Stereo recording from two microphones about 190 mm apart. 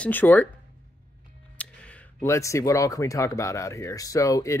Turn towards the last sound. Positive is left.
turn(degrees=15)  # may be behind; listen again after turning